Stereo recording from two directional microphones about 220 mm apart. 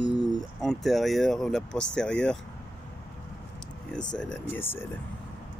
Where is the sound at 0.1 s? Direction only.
20° left (ahead or behind).